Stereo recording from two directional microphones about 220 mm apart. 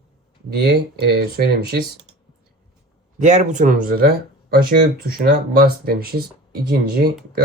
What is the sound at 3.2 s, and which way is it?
Speech, 35° right (ahead or behind).